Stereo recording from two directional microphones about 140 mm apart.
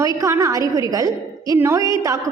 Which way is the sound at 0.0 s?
25° right (ahead or behind).